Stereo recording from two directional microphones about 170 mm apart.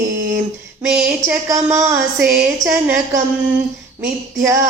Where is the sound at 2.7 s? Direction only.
5° right (ahead or behind).